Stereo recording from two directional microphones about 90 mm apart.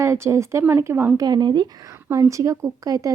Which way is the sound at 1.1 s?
45° right (ahead or behind).